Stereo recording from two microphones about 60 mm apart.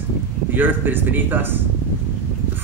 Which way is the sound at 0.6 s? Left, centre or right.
Right.